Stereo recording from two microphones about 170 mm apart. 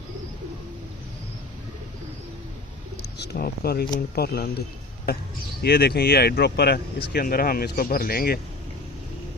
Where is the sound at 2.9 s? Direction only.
80° left.